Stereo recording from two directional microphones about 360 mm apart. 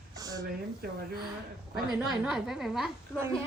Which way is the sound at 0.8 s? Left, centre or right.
Right.